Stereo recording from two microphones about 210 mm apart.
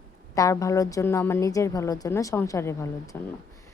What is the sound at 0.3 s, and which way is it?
A woman's voice, 15° left (ahead or behind).